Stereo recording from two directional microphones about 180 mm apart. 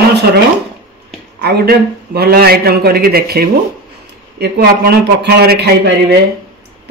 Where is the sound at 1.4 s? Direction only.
60° right (ahead or behind).